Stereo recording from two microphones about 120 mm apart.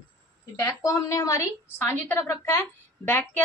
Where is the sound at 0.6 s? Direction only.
25° left (ahead or behind).